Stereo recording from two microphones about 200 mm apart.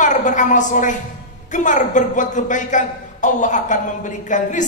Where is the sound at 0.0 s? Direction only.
40° left (ahead or behind).